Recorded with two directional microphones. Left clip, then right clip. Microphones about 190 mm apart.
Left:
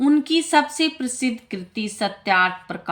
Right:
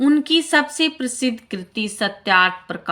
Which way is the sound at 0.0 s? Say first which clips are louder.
Right 2 dB; 25° right (ahead or behind).